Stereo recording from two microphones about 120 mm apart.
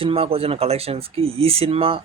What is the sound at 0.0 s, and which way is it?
Speech, 50° right (ahead or behind).